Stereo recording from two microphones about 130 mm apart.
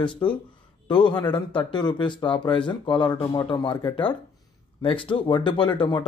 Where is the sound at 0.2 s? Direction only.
35° left (ahead or behind).